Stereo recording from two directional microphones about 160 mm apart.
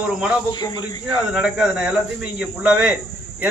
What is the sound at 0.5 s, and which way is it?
Speech, 25° left (ahead or behind).